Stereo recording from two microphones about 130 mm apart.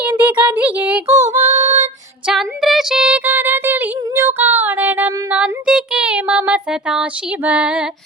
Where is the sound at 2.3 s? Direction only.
Centre (ahead or behind).